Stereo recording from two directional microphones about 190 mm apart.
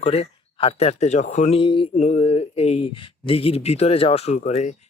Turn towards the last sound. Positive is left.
turn(degrees=35)  # may be behind; listen again after turning